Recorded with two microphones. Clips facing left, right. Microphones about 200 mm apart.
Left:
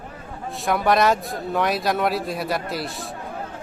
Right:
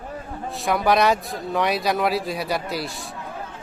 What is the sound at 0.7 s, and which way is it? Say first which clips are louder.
Speech: even; centre (ahead or behind).